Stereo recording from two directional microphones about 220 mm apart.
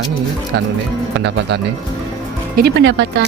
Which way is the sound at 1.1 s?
50° right (ahead or behind).